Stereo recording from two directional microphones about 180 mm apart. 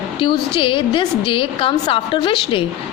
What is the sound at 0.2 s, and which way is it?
A woman's voice, 30° left (ahead or behind).